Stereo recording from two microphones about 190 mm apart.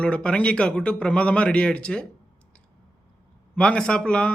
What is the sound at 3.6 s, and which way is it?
Speech, 5° left (ahead or behind).